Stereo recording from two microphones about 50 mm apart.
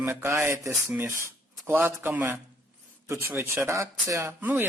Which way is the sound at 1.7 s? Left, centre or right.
Right.